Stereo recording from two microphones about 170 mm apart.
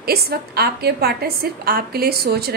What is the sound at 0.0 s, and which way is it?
A woman's voice, 65° right (ahead or behind).